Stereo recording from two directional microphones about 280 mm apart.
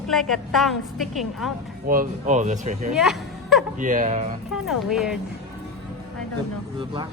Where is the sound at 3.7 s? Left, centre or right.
Right.